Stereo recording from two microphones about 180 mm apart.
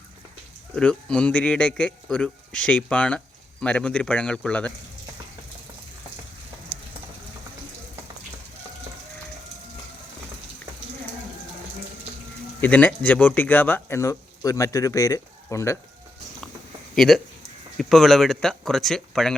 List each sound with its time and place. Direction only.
0.8 s speech: 5° left (ahead or behind)
12.6 s speech: 10° left (ahead or behind)
16.9 s speech: centre (ahead or behind)